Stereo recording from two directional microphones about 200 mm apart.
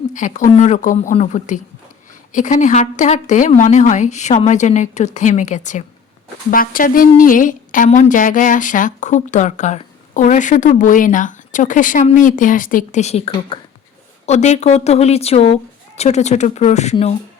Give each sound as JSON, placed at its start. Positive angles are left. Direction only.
{"t": 0.1, "sound": "a woman's voice", "side_deg": 40}